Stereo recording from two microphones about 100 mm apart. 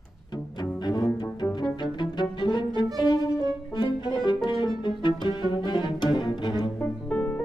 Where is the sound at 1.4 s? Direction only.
50° left (ahead or behind).